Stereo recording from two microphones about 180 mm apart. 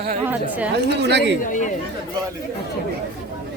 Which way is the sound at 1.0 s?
70° right (ahead or behind).